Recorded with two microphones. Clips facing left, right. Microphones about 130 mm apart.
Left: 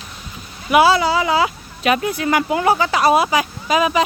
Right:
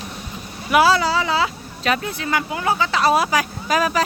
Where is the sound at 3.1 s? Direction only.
10° left (ahead or behind).